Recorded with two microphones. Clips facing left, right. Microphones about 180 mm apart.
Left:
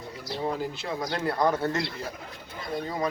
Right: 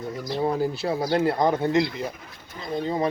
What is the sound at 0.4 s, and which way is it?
Speech, 35° right (ahead or behind).